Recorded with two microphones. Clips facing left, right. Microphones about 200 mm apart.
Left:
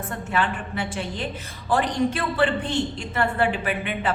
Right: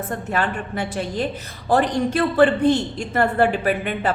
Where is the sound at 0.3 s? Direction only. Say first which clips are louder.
Even; 40° right (ahead or behind).